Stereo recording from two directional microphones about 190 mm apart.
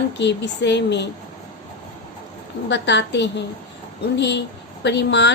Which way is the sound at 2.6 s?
65° left (ahead or behind).